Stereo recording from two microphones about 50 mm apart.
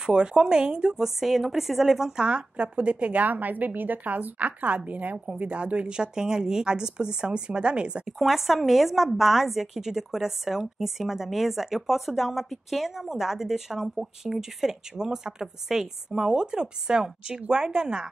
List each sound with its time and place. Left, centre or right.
0.0 s a woman's voice: centre
1.0 s speech: centre; by 8.1 s right
8.5 s a woman's voice: centre